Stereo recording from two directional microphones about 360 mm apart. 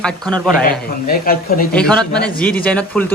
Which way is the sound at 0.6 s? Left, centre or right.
Left.